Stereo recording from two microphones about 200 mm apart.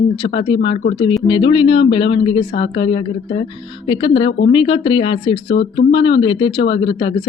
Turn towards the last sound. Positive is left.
turn(degrees=25)  # may be behind; listen again after turning